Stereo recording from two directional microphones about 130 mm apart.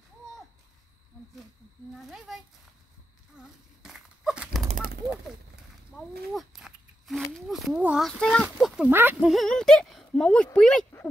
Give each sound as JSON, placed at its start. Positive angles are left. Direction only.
{"t": 2.0, "sound": "speech", "side_deg": 0}
{"t": 3.4, "sound": "dog", "side_deg": -5}
{"t": 5.9, "sound": "a sound", "side_deg": 0}
{"t": 7.3, "sound": "speech", "side_deg": 0}
{"t": 8.1, "sound": "speech", "side_deg": 5}